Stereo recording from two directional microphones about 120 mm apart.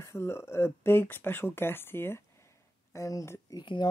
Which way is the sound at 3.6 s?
40° left (ahead or behind).